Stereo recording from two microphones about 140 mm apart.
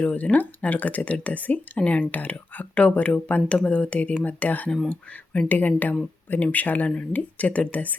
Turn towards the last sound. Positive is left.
turn(degrees=10)  # may be behind; listen again after turning